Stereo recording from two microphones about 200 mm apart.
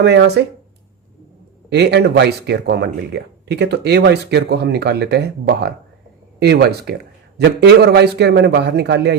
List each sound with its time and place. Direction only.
0.0 s speech: 60° right (ahead or behind)
1.7 s speech: 55° right (ahead or behind)